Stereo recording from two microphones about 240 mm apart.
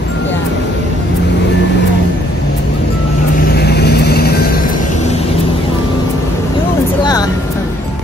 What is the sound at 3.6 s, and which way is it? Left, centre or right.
Vehicle, left.